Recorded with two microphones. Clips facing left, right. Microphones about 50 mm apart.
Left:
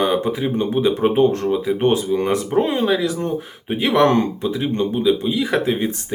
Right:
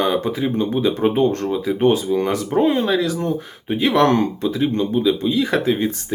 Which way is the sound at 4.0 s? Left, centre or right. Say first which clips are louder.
Left 2 dB; centre.